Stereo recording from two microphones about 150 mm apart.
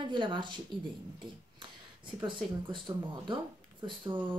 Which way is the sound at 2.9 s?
25° right (ahead or behind).